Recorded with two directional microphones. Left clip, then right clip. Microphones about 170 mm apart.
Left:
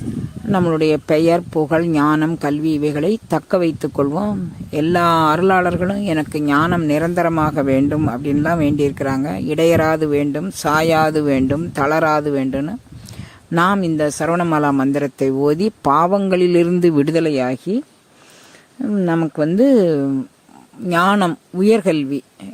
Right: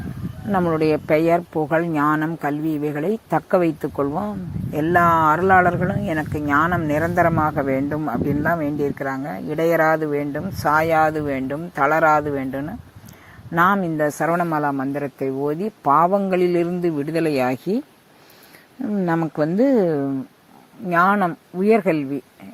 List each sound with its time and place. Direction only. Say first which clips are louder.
0.5 s speech: left 3 dB; 50° left (ahead or behind)
3.8 s speech: left 4 dB; 50° left (ahead or behind)
8.6 s speech: left 5 dB; 60° left (ahead or behind)
17.2 s speech: left 3 dB; 30° left (ahead or behind); by 22.0 s 50° left (ahead or behind)